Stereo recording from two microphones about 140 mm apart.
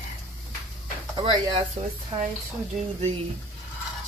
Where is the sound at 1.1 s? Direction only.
35° right (ahead or behind).